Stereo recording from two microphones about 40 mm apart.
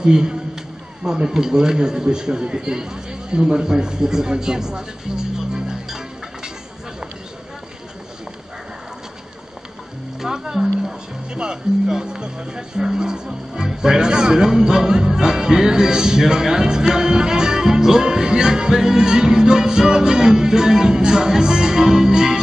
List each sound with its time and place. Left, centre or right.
0.0 s a man's voice: centre
10.2 s speech: centre